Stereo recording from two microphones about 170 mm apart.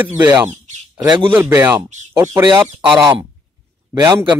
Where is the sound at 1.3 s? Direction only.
15° right (ahead or behind).